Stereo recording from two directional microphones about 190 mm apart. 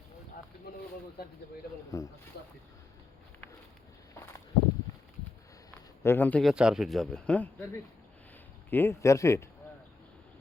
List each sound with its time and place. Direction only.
1.9 s speech: 20° left (ahead or behind)
2.3 s speech: 60° left (ahead or behind)
6.0 s speech: 10° left (ahead or behind)
6.5 s speech: 5° right (ahead or behind)
8.7 s speech: 15° left (ahead or behind)